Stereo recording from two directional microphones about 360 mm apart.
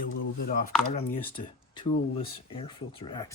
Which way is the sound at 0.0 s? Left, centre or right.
Left.